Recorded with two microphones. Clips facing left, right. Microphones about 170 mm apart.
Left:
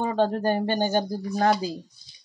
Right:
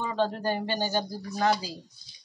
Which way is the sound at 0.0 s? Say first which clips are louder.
Left 5 dB; 50° left (ahead or behind).